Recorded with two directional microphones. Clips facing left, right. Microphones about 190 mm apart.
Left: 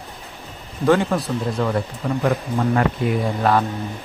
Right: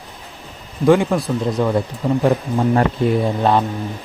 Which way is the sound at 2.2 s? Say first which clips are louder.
Right 2 dB; 25° right (ahead or behind).